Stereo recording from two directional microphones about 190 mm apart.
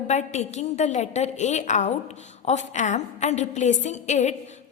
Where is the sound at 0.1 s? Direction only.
35° left (ahead or behind).